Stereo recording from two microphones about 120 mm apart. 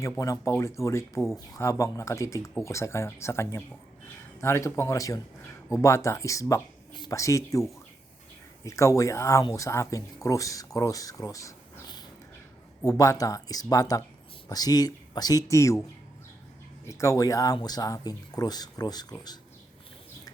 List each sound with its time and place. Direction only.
0.0 s speech: 25° left (ahead or behind)
16.8 s speech: 25° left (ahead or behind)